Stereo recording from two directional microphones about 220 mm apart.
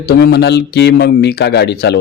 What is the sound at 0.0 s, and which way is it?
A man's voice, 45° left (ahead or behind).